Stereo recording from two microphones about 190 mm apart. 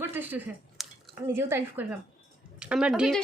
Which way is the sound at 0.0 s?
10° right (ahead or behind).